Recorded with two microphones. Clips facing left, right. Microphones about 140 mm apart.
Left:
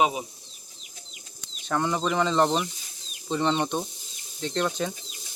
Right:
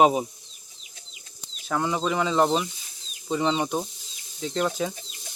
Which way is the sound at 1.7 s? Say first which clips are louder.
Even; 5° right (ahead or behind).